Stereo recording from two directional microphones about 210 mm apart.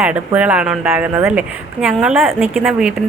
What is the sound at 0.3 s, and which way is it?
A woman's voice, 5° right (ahead or behind).